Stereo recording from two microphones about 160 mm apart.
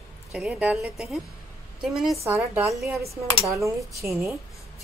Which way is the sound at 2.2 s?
15° right (ahead or behind).